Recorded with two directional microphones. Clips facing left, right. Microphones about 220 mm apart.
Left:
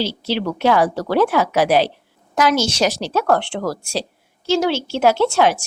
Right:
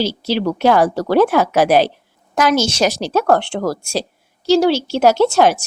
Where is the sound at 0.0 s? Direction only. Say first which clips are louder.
Right 3 dB; 40° right (ahead or behind).